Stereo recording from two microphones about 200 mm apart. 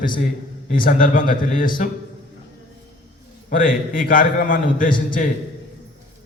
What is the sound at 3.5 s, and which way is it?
A man's voice, 45° left (ahead or behind).